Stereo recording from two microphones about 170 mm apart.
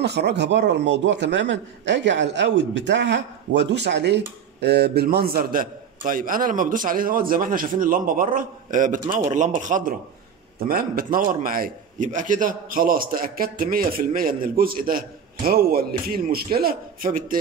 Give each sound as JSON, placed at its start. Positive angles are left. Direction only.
{"t": 0.0, "sound": "a man's voice", "side_deg": -80}
{"t": 4.6, "sound": "a man's voice", "side_deg": -75}
{"t": 10.6, "sound": "a man's voice", "side_deg": -60}